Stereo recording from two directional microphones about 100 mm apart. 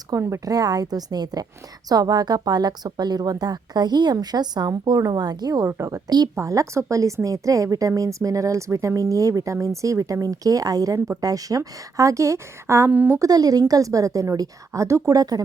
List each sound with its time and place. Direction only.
0.1 s a woman's voice: 30° right (ahead or behind)
5.6 s a woman's voice: 30° right (ahead or behind)
13.1 s a woman's voice: 40° right (ahead or behind)